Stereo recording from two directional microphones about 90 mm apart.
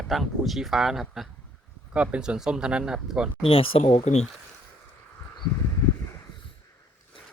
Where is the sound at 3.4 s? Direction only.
90° left.